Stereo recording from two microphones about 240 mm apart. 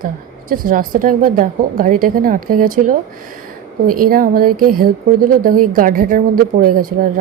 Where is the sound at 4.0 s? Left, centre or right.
Right.